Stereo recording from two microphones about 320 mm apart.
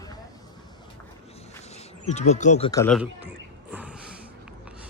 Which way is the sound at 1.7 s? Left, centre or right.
Left.